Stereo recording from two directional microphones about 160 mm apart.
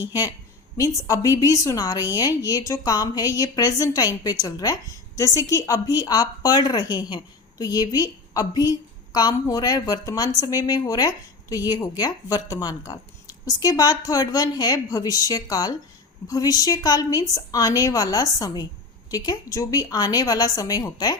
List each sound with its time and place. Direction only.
0.8 s a woman's voice: 20° left (ahead or behind)